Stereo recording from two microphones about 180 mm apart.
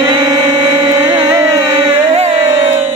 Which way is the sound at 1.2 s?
15° right (ahead or behind).